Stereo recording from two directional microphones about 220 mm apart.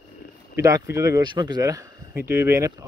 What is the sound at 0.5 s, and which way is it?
Speech, 15° right (ahead or behind).